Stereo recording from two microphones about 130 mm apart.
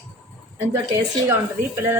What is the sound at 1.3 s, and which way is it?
Speech, 20° right (ahead or behind).